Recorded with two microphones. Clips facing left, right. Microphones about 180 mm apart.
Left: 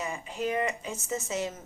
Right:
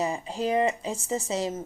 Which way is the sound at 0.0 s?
35° right (ahead or behind).